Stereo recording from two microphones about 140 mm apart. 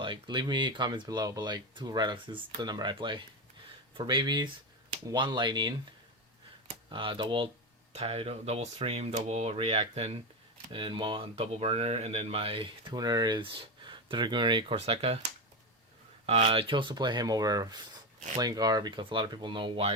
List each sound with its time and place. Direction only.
0.0 s speech: 35° right (ahead or behind)
6.9 s speech: 35° right (ahead or behind)
10.7 s speech: 35° right (ahead or behind)
16.2 s speech: 45° right (ahead or behind)